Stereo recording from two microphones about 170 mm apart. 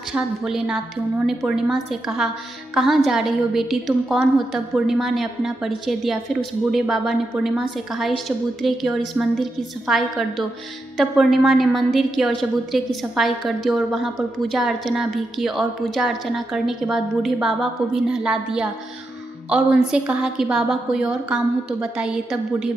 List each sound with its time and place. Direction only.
0.1 s a woman's voice: 5° right (ahead or behind)